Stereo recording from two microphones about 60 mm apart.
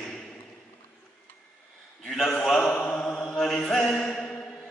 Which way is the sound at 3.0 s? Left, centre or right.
Centre.